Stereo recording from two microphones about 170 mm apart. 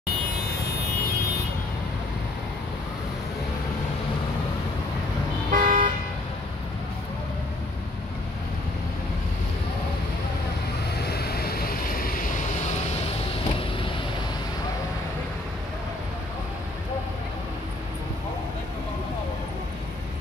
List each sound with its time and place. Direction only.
5.5 s car: 55° right (ahead or behind)
11.0 s vehicle: 70° left (ahead or behind)